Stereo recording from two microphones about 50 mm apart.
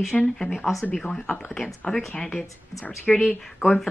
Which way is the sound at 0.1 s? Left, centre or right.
Centre.